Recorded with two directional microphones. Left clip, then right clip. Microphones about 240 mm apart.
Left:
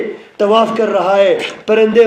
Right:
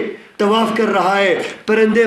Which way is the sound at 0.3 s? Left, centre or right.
Right.